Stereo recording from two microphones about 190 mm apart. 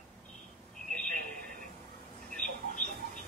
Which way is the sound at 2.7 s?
40° left (ahead or behind).